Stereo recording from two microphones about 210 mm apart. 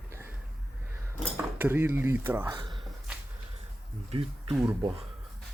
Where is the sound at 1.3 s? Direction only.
10° right (ahead or behind).